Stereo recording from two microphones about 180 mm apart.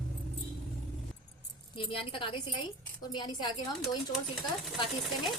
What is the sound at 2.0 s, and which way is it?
Speech, 30° left (ahead or behind).